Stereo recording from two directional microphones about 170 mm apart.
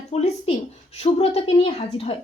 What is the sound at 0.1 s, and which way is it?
A woman's voice, 35° left (ahead or behind).